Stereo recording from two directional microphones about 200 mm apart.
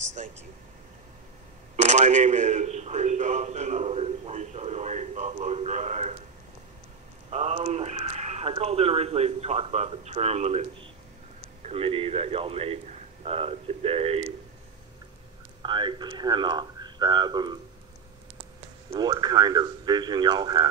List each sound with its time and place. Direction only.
1.8 s a sound: 35° right (ahead or behind)
7.2 s a man's voice: 35° right (ahead or behind)
15.6 s a man's voice: 25° right (ahead or behind)
18.9 s speech: 20° right (ahead or behind)